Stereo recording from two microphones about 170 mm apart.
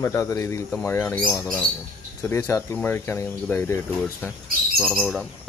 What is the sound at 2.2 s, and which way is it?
Speech, 15° left (ahead or behind).